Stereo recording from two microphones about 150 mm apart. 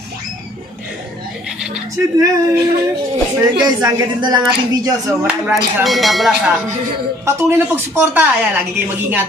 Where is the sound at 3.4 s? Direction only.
25° right (ahead or behind).